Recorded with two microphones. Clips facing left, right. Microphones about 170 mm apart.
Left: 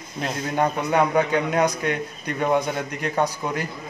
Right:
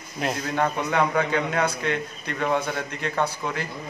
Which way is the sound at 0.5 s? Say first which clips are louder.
Left 3 dB; 20° left (ahead or behind).